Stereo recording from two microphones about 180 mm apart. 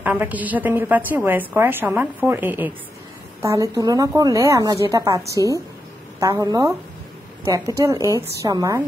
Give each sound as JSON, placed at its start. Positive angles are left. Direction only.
{"t": 0.0, "sound": "a woman's voice", "side_deg": -10}